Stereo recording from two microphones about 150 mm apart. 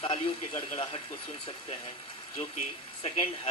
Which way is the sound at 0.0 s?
35° left (ahead or behind).